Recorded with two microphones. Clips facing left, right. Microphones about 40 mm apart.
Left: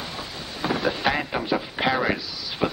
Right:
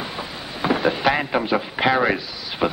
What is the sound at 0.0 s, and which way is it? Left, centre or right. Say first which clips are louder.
Speech: right 4 dB; centre.